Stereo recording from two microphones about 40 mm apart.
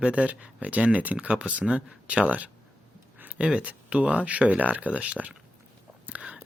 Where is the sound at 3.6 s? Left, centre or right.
Right.